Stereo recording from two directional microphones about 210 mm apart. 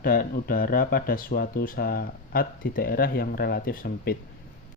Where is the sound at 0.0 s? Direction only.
45° left (ahead or behind).